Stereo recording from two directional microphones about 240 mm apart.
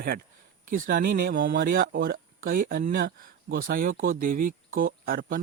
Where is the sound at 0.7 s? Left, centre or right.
Right.